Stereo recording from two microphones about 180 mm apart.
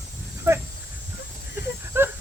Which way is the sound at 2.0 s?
10° right (ahead or behind).